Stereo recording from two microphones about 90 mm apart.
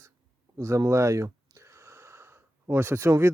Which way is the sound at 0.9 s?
35° right (ahead or behind).